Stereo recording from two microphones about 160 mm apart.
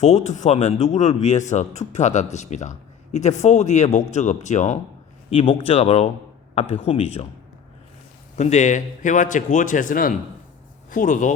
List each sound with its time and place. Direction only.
0.0 s speech: 45° left (ahead or behind)
8.4 s a man's voice: 45° left (ahead or behind)